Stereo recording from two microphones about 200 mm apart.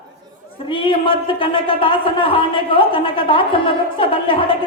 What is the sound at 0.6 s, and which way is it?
Speech, 25° left (ahead or behind).